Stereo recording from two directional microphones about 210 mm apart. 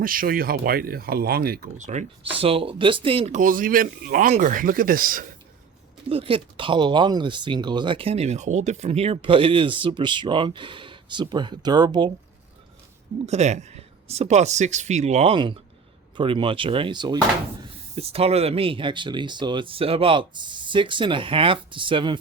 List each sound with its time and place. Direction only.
0.0 s speech: 40° right (ahead or behind)
6.1 s speech: 25° right (ahead or behind)
13.2 s speech: 30° right (ahead or behind)